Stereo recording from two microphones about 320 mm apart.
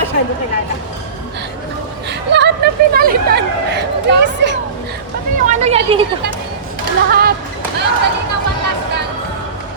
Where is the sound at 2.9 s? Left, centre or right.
Right.